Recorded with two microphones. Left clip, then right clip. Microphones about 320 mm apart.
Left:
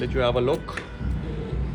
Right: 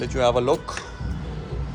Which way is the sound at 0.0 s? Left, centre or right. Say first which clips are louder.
Right 2 dB; centre.